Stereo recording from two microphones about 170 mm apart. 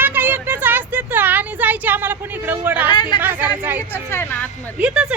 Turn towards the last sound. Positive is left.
turn(degrees=-5)  # may be behind; listen again after turning